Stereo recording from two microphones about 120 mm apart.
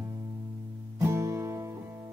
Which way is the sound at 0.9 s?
25° right (ahead or behind).